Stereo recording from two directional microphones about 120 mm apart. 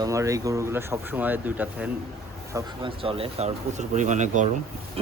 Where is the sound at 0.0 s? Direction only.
25° right (ahead or behind).